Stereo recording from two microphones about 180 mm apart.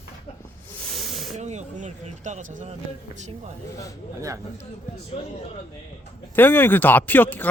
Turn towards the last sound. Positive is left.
turn(degrees=10)  # may be behind; listen again after turning